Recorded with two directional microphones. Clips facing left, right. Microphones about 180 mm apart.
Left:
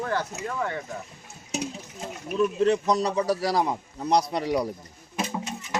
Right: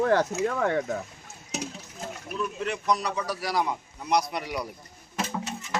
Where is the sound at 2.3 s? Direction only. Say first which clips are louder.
Left 10 dB; 30° left (ahead or behind).